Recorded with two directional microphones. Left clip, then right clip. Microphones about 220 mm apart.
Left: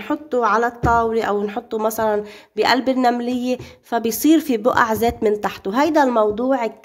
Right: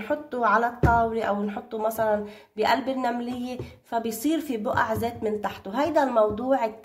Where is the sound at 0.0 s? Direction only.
50° left (ahead or behind).